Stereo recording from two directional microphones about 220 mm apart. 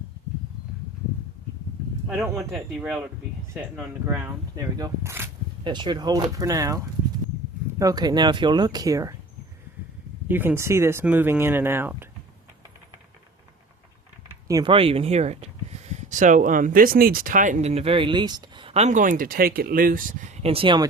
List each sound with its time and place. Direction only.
2.0 s speech: 10° right (ahead or behind)
2.5 s speech: centre (ahead or behind)
10.2 s speech: 10° right (ahead or behind)
14.4 s speech: 20° right (ahead or behind)